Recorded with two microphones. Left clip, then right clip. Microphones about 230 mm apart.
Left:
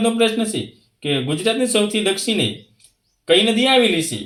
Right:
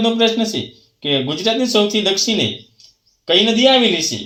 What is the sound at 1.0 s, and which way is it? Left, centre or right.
A man's voice, centre.